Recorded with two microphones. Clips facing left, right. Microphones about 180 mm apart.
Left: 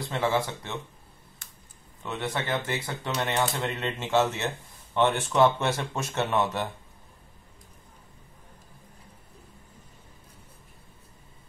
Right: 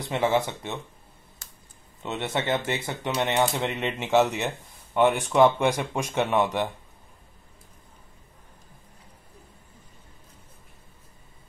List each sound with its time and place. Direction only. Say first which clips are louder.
0.0 s speech: right 3 dB; 20° right (ahead or behind)
2.0 s speech: right 3 dB; 20° right (ahead or behind)